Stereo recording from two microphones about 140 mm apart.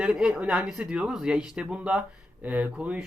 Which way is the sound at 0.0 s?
5° right (ahead or behind).